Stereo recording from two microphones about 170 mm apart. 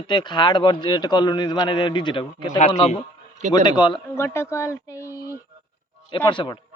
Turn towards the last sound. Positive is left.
turn(degrees=25)  # may be behind; listen again after turning